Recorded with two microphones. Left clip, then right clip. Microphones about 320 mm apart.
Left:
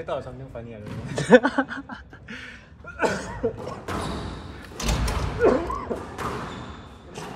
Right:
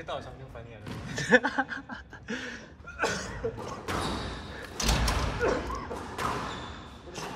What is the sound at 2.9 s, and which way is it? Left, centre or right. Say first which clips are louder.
Cough: left 5 dB; left.